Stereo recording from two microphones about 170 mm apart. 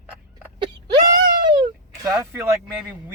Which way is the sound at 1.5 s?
25° right (ahead or behind).